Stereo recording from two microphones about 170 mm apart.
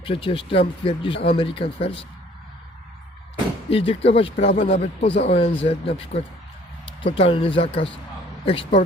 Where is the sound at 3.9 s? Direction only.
35° left (ahead or behind).